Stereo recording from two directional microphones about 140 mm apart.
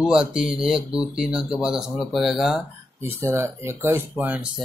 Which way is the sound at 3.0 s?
20° right (ahead or behind).